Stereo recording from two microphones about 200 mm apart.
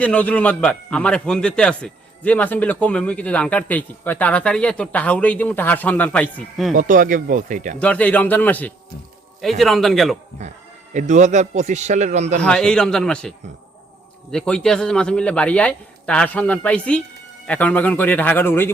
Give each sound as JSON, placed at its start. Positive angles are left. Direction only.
{"t": 0.0, "sound": "a man's voice", "side_deg": 5}
{"t": 6.7, "sound": "a man's voice", "side_deg": -40}
{"t": 7.8, "sound": "a man's voice", "side_deg": 5}
{"t": 10.9, "sound": "a man's voice", "side_deg": -35}
{"t": 12.4, "sound": "a man's voice", "side_deg": 5}